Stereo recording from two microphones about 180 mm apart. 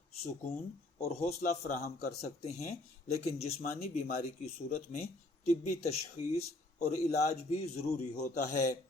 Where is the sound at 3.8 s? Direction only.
55° left (ahead or behind).